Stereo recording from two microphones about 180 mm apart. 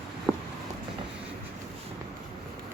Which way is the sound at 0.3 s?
10° left (ahead or behind).